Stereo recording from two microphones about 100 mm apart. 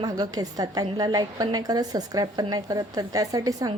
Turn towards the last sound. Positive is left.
turn(degrees=-40)  # may be behind; listen again after turning